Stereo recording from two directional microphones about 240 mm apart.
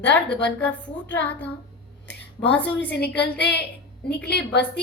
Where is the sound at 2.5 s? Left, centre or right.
Centre.